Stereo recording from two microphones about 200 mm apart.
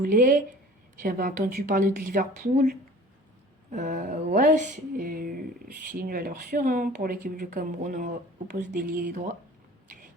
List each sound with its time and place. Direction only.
0.0 s a woman's voice: 45° right (ahead or behind)